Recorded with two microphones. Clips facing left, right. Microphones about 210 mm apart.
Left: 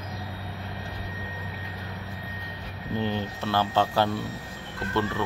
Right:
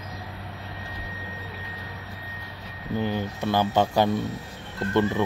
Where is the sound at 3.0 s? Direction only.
10° right (ahead or behind).